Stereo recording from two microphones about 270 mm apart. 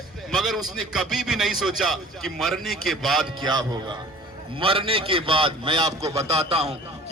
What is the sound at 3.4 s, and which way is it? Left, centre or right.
A man's voice, centre.